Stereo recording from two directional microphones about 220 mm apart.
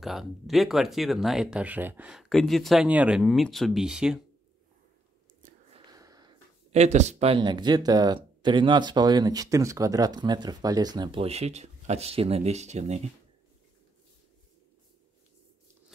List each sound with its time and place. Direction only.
0.0 s speech: centre (ahead or behind)
5.4 s biting: 35° right (ahead or behind)
5.9 s a sound: 15° right (ahead or behind)
6.7 s speech: 30° right (ahead or behind)